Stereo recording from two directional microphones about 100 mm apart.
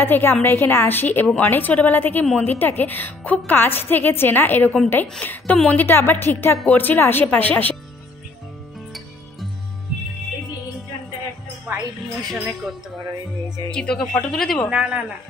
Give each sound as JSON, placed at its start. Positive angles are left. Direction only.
{"t": 0.0, "sound": "a woman's voice", "side_deg": 20}
{"t": 12.3, "sound": "speech", "side_deg": 0}
{"t": 13.7, "sound": "a woman's voice", "side_deg": 10}
{"t": 14.7, "sound": "a man's voice", "side_deg": -10}